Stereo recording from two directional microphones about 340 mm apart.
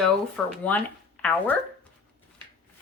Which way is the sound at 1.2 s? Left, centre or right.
Centre.